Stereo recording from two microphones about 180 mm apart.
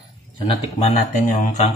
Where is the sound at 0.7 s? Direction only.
40° left (ahead or behind).